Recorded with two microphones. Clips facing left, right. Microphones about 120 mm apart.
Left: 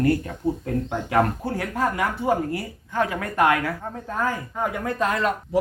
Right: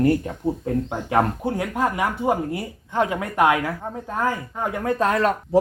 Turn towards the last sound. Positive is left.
turn(degrees=-40)  # may be behind; listen again after turning